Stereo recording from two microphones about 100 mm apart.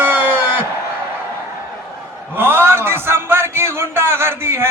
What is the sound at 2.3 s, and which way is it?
A man's voice, 25° right (ahead or behind).